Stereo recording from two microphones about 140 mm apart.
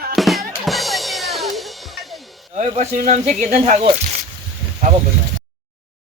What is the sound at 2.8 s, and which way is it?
Speech, 55° right (ahead or behind).